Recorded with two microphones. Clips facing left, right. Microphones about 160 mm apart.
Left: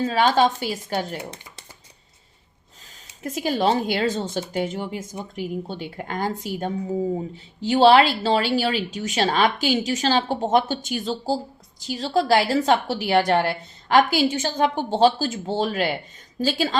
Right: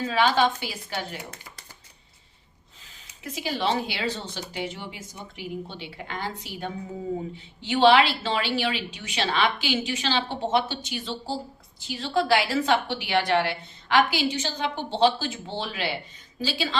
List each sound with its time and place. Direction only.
0.0 s a woman's voice: 40° left (ahead or behind)
1.2 s speech: 25° left (ahead or behind)
3.2 s a woman's voice: 45° left (ahead or behind)